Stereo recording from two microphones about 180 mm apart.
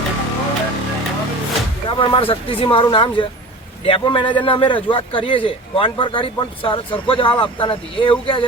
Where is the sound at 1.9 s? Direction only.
30° left (ahead or behind).